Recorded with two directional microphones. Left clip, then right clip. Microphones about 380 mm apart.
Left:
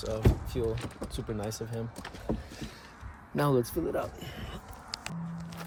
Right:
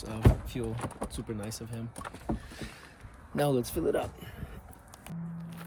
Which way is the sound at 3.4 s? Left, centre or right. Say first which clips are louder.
Even; centre.